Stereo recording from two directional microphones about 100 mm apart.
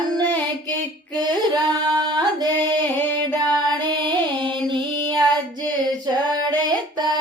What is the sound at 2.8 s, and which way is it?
Music, 20° left (ahead or behind).